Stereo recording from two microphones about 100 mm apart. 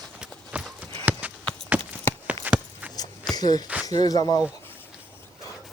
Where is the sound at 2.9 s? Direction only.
40° left (ahead or behind).